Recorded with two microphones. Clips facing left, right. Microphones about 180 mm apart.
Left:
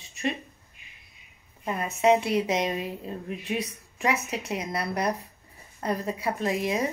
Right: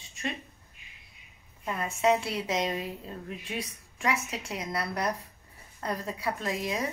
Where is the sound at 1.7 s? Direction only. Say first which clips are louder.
Left 4 dB; 20° left (ahead or behind).